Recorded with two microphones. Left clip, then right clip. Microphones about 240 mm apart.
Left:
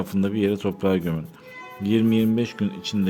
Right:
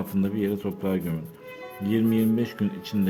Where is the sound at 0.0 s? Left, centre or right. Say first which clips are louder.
Left 4 dB; centre.